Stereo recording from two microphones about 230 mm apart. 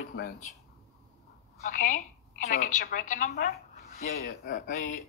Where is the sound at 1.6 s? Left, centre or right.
Left.